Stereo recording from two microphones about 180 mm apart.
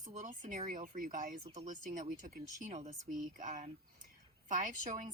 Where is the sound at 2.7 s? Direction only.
40° right (ahead or behind).